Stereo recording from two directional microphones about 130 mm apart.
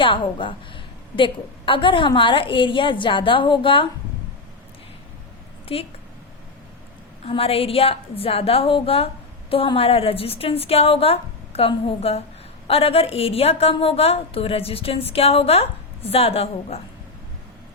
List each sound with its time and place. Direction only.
0.0 s a woman's voice: 40° left (ahead or behind)
5.7 s a woman's voice: 45° left (ahead or behind)
7.3 s a woman's voice: 50° left (ahead or behind)